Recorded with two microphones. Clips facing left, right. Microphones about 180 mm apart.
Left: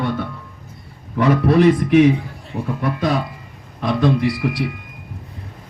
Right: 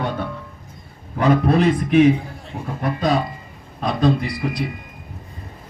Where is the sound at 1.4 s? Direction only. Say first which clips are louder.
Left 4 dB; 60° left (ahead or behind).